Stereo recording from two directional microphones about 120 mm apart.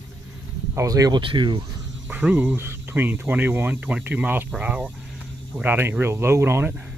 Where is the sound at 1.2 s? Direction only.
45° right (ahead or behind).